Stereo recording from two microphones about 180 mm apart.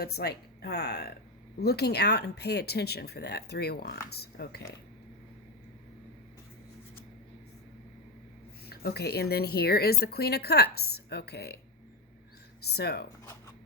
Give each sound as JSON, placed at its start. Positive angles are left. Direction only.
{"t": 0.0, "sound": "speech", "side_deg": 60}
{"t": 8.6, "sound": "speech", "side_deg": 60}
{"t": 12.6, "sound": "speech", "side_deg": 65}